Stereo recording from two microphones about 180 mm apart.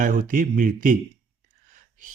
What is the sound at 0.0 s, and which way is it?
Speech, 50° right (ahead or behind).